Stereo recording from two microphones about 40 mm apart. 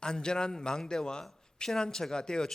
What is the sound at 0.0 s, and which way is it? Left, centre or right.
A man's voice, centre.